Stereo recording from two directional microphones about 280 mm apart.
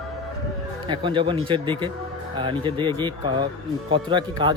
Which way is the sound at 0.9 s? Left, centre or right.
Centre.